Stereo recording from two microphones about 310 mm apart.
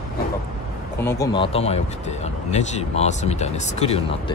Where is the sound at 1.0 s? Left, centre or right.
Centre.